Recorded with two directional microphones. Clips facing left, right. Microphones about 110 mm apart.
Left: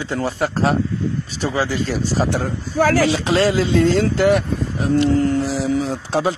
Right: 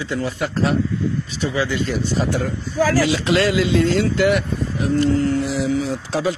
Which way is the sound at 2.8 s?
60° left (ahead or behind).